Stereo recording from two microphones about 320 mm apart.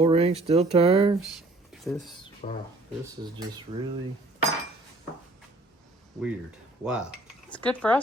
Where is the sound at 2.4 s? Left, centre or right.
Left.